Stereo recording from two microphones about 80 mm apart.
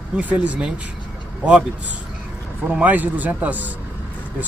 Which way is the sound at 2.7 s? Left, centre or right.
Centre.